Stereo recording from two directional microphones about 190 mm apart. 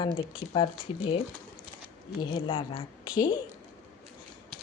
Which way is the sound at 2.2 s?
25° left (ahead or behind).